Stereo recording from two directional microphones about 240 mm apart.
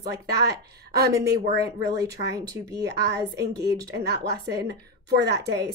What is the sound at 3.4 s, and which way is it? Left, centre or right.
A woman's voice, right.